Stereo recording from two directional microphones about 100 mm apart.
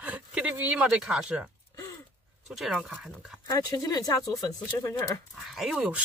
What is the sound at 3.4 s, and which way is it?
Speech, 40° left (ahead or behind).